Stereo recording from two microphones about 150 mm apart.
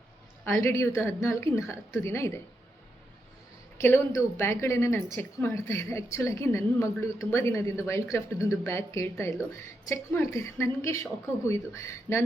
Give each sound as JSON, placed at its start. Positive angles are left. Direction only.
{"t": 0.4, "sound": "a woman's voice", "side_deg": 20}
{"t": 3.8, "sound": "a woman's voice", "side_deg": 15}